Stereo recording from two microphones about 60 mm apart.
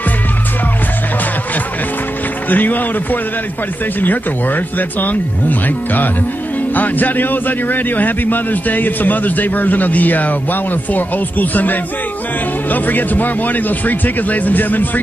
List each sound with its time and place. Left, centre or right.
2.5 s a man's voice: left